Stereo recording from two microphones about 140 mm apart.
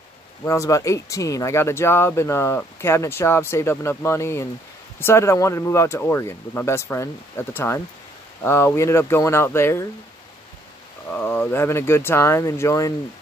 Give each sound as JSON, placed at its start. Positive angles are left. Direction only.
{"t": 0.5, "sound": "speech", "side_deg": 20}
{"t": 11.1, "sound": "speech", "side_deg": 15}